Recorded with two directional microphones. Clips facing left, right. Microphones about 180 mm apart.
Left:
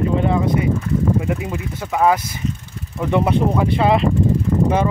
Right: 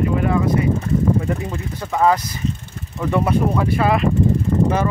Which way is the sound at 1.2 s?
10° left (ahead or behind).